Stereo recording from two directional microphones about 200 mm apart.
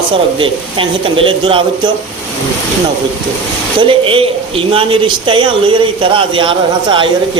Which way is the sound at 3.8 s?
25° right (ahead or behind).